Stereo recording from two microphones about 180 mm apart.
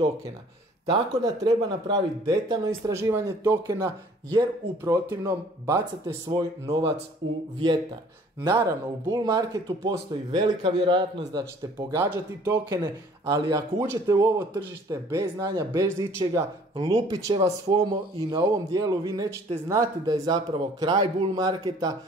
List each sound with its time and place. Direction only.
0.9 s a man's voice: 25° right (ahead or behind)
2.2 s a man's voice: 15° right (ahead or behind)
8.5 s a man's voice: 15° right (ahead or behind)